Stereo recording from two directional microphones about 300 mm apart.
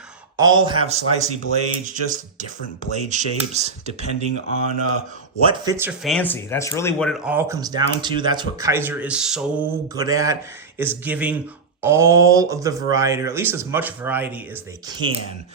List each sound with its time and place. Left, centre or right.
0.3 s speech: centre
4.0 s speech: right
5.5 s speech: centre